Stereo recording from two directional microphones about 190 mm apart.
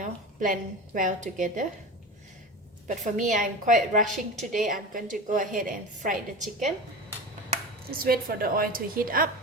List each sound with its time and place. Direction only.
0.0 s a woman's voice: 45° right (ahead or behind)
2.8 s a woman's voice: 40° right (ahead or behind)
4.0 s a woman's voice: centre (ahead or behind)
4.6 s a woman's voice: 45° right (ahead or behind)
7.9 s a woman's voice: 50° right (ahead or behind)